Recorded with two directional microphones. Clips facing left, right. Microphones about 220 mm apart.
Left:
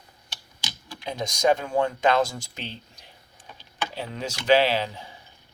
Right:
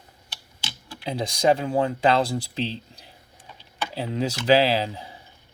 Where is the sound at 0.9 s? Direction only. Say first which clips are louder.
Right 3 dB; 30° right (ahead or behind).